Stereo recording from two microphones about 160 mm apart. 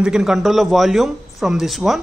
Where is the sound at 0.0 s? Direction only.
5° right (ahead or behind).